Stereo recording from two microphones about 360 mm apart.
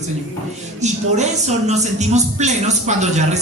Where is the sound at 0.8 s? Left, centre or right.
Centre.